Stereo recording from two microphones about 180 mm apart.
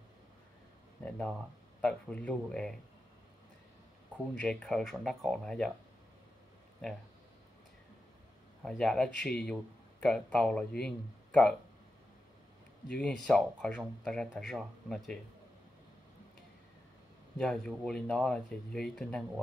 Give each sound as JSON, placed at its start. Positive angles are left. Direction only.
{"t": 1.0, "sound": "speech", "side_deg": 5}
{"t": 4.4, "sound": "speech", "side_deg": 5}
{"t": 8.6, "sound": "speech", "side_deg": 5}
{"t": 12.8, "sound": "speech", "side_deg": 5}
{"t": 17.4, "sound": "speech", "side_deg": 5}